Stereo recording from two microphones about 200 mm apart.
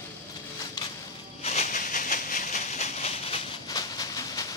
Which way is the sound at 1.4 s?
35° left (ahead or behind).